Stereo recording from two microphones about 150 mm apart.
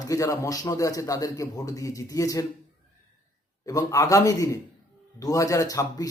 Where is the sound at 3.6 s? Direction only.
25° left (ahead or behind).